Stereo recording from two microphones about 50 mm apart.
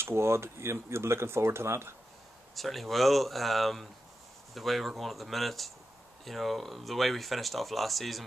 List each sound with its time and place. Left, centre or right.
0.0 s speech: right
2.5 s speech: centre